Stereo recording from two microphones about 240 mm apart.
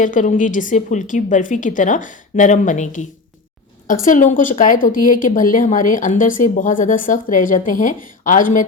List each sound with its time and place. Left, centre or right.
0.0 s speech: left